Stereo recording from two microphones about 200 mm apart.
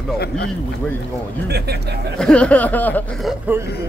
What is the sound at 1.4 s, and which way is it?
Speech, 55° right (ahead or behind).